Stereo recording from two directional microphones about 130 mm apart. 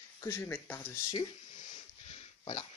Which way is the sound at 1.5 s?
75° left (ahead or behind).